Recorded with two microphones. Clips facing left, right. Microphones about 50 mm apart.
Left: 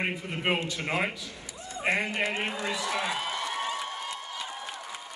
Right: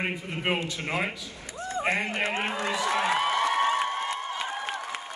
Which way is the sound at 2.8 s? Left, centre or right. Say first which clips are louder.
Right 8 dB; right.